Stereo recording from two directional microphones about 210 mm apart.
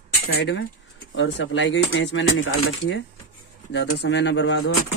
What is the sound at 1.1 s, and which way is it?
Speech, 65° left (ahead or behind).